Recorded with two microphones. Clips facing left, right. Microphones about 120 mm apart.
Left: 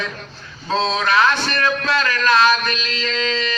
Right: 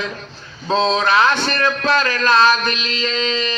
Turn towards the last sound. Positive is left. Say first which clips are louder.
# right 1 dB
turn(degrees=-25)  # may be behind; listen again after turning